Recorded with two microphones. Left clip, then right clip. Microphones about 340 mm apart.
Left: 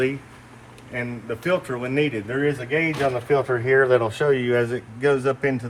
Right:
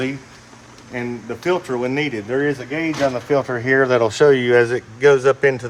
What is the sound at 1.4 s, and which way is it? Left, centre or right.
Speech, centre.